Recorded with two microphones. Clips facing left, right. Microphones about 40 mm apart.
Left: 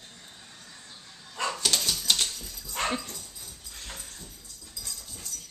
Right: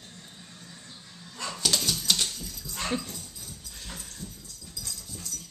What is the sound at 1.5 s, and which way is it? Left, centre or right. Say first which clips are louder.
Dog: right 3 dB; centre.